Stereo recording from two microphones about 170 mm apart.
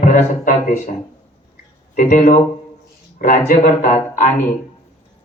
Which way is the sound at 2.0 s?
45° left (ahead or behind).